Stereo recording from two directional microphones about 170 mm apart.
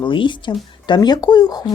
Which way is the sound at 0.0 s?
30° left (ahead or behind).